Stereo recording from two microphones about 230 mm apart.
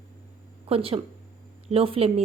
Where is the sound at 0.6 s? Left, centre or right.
Right.